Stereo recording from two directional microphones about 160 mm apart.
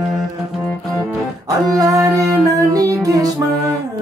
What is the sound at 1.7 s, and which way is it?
Music, 20° right (ahead or behind).